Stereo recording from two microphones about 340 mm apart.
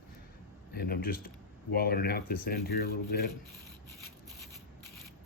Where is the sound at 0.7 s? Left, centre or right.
Left.